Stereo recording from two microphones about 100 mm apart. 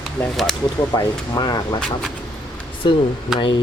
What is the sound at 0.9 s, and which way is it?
Speech, 40° left (ahead or behind).